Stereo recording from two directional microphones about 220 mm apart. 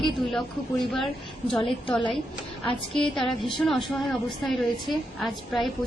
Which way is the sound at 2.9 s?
Centre (ahead or behind).